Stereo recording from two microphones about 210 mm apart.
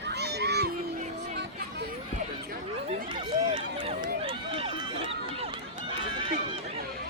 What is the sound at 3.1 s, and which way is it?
Run, 25° right (ahead or behind).